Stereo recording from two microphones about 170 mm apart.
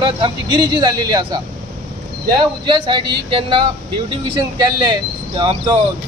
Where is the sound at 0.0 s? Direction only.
25° right (ahead or behind).